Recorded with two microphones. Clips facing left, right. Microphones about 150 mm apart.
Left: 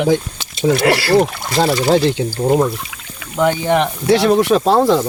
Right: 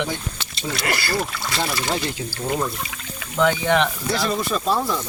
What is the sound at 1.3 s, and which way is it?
Speech, 50° left (ahead or behind).